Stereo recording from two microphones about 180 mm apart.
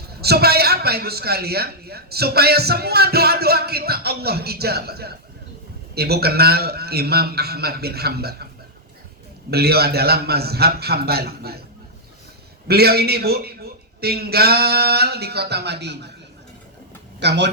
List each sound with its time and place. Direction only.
0.2 s a man's voice: 60° right (ahead or behind)
9.5 s a man's voice: 60° right (ahead or behind)
12.6 s a man's voice: 60° right (ahead or behind)
17.2 s speech: 70° right (ahead or behind)